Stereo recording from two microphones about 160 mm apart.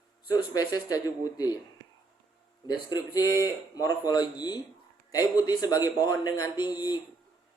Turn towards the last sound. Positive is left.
turn(degrees=25)  # may be behind; listen again after turning